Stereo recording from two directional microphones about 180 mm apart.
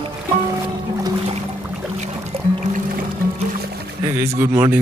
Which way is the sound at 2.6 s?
50° right (ahead or behind).